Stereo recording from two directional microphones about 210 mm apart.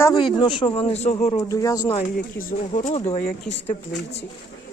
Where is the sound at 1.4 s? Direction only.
15° left (ahead or behind).